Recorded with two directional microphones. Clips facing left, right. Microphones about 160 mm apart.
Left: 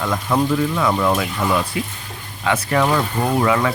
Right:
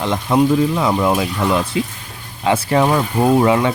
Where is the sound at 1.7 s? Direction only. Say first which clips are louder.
Right 5 dB; 25° right (ahead or behind).